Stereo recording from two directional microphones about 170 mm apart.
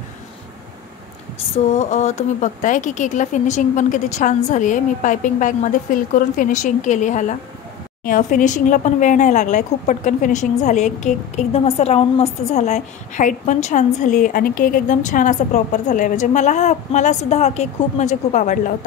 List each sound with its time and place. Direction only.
1.7 s speech: 45° left (ahead or behind)